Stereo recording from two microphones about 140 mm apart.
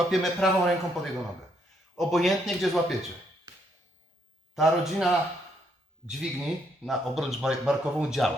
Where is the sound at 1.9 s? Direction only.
Centre (ahead or behind).